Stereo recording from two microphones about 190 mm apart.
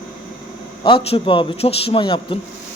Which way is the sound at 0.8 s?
30° left (ahead or behind).